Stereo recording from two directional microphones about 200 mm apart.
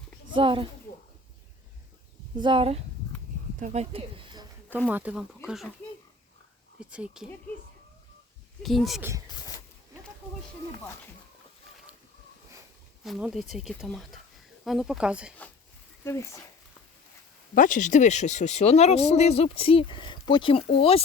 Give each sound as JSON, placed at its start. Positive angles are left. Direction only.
{"t": 0.3, "sound": "speech", "side_deg": -25}
{"t": 2.4, "sound": "speech", "side_deg": -25}
{"t": 4.9, "sound": "speech", "side_deg": -5}
{"t": 6.9, "sound": "speech", "side_deg": -5}
{"t": 8.6, "sound": "speech", "side_deg": 0}
{"t": 13.1, "sound": "speech", "side_deg": 0}
{"t": 16.0, "sound": "speech", "side_deg": 15}
{"t": 17.5, "sound": "speech", "side_deg": 40}